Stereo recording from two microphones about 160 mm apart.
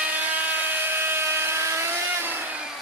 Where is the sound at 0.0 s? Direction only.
10° right (ahead or behind).